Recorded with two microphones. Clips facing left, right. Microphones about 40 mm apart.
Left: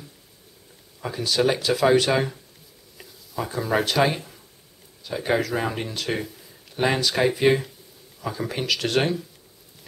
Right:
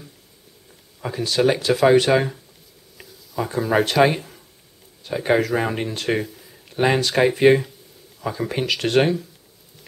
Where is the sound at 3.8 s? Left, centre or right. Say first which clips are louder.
Right 6 dB; centre.